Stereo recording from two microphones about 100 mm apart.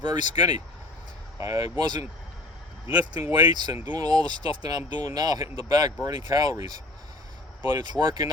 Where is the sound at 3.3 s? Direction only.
45° right (ahead or behind).